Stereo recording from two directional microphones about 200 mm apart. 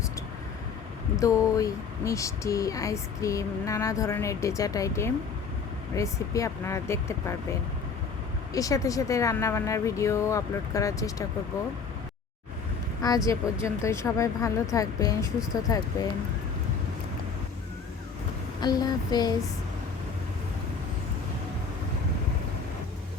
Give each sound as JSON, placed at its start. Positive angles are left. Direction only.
{"t": 1.1, "sound": "speech", "side_deg": 15}
{"t": 8.5, "sound": "speech", "side_deg": 15}
{"t": 13.0, "sound": "speech", "side_deg": 20}
{"t": 18.6, "sound": "a sound", "side_deg": 20}